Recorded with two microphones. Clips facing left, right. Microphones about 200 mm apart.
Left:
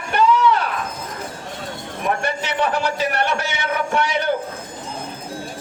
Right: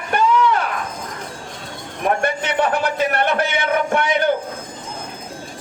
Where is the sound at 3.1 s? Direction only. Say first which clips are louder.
Right 3 dB; 55° right (ahead or behind).